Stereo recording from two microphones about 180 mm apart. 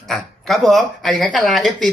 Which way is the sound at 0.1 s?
Centre (ahead or behind).